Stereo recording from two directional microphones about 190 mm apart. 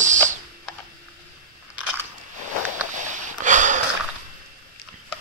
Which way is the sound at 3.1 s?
40° right (ahead or behind).